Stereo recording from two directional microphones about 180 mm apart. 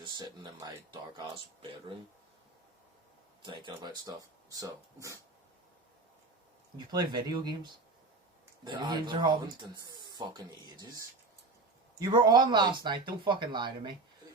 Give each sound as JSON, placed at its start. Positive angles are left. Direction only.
{"t": 0.0, "sound": "a sound", "side_deg": -25}
{"t": 1.1, "sound": "speech", "side_deg": -25}
{"t": 3.4, "sound": "speech", "side_deg": -25}
{"t": 6.7, "sound": "speech", "side_deg": -25}